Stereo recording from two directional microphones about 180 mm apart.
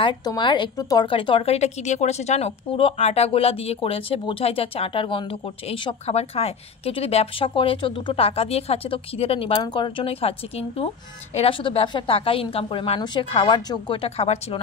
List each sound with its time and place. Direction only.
0.0 s a woman's voice: 25° left (ahead or behind)